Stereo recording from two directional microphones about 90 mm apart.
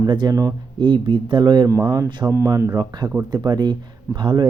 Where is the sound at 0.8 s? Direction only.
60° right (ahead or behind).